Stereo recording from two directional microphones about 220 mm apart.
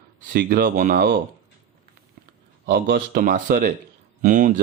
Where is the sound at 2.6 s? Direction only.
40° right (ahead or behind).